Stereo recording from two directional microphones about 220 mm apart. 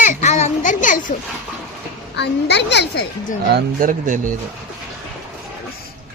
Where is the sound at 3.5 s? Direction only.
40° right (ahead or behind).